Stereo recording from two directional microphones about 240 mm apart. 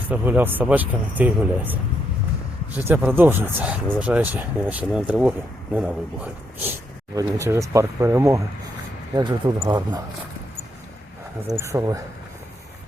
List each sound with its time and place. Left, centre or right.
0.1 s speech: centre
11.5 s speech: centre